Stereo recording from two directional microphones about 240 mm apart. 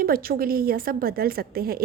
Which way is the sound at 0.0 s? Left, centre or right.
Right.